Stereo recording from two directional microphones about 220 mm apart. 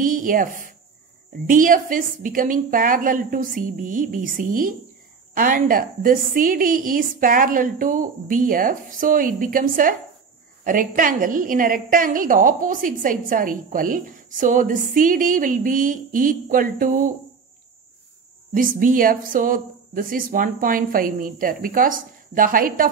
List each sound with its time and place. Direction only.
0.0 s a sound: 40° right (ahead or behind)
1.5 s a woman's voice: 40° right (ahead or behind)
18.5 s a woman's voice: 40° right (ahead or behind)